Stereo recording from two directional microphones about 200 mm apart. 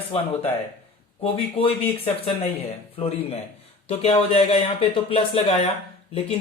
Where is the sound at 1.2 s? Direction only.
30° left (ahead or behind).